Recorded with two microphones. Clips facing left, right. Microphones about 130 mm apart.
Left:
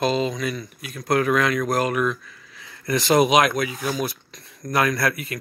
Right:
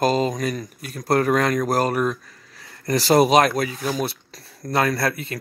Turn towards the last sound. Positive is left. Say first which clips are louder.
# even
turn(degrees=-30)  # may be behind; listen again after turning